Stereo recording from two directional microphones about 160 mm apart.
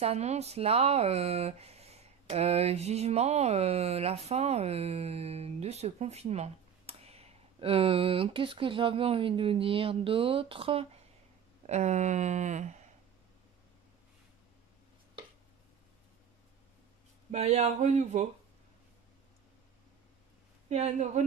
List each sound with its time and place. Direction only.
0.0 s speech: 40° right (ahead or behind)
11.6 s speech: 45° right (ahead or behind)
17.3 s speech: 45° right (ahead or behind)
20.6 s speech: 45° right (ahead or behind)